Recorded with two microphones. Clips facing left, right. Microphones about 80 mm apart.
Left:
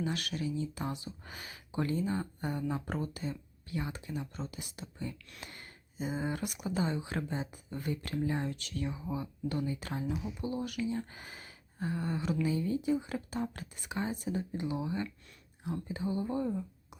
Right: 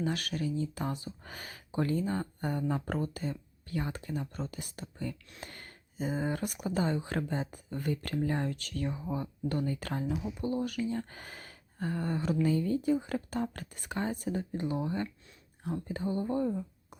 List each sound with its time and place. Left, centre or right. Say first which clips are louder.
0.0 s speech: right 2 dB; right
15.9 s speech: right 1 dB; right
16.5 s a sound: right 1 dB; centre